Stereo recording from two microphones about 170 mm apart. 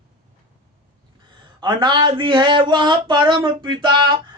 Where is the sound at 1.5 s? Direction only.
25° right (ahead or behind).